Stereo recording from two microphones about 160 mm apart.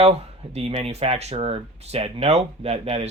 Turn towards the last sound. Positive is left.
turn(degrees=-40)  # may be behind; listen again after turning